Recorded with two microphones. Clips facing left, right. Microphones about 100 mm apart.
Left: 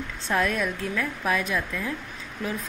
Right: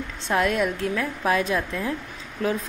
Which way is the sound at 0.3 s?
25° right (ahead or behind).